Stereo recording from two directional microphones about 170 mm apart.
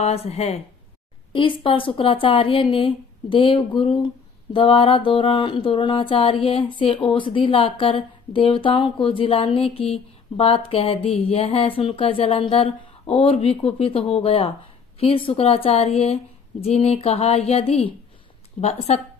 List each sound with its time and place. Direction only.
0.0 s speech: 40° left (ahead or behind)